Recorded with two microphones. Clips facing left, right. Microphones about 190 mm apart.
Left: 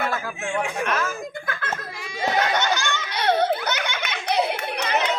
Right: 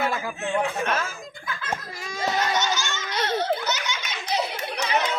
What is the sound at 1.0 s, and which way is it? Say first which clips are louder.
Speech: left 6 dB; 60° left (ahead or behind).